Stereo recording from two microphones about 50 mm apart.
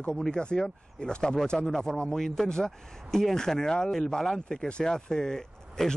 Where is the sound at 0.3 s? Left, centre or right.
Centre.